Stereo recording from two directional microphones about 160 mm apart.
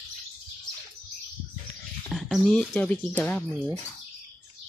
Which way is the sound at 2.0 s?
Centre (ahead or behind).